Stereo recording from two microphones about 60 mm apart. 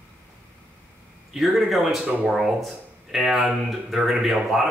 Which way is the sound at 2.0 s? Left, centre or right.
Right.